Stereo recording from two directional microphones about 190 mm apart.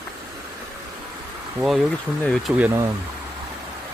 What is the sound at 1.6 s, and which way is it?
Speech, centre (ahead or behind).